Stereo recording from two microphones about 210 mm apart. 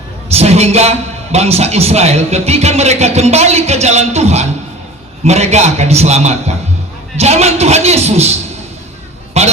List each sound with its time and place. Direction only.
0.3 s a man's voice: 30° right (ahead or behind)
9.4 s a man's voice: 30° right (ahead or behind)